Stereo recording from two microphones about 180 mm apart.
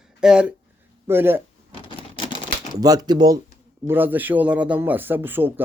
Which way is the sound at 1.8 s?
25° left (ahead or behind).